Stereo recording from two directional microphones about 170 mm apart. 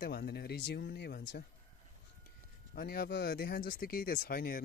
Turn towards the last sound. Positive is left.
turn(degrees=55)  # may be behind; listen again after turning